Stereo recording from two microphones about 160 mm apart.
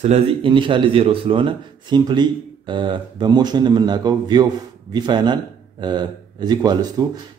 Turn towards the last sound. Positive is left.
turn(degrees=-25)  # may be behind; listen again after turning